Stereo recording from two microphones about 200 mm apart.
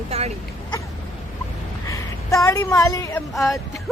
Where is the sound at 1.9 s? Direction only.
15° left (ahead or behind).